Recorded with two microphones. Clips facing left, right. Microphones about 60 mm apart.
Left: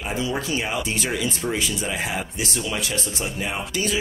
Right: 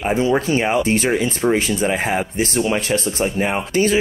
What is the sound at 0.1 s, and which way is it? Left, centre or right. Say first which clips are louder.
Speech: right 8 dB; right.